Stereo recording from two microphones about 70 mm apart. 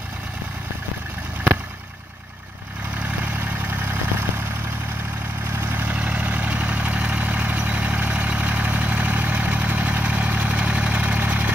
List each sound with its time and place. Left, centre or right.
3.1 s vehicle: right
5.5 s vehicle: right
5.9 s vehicle: centre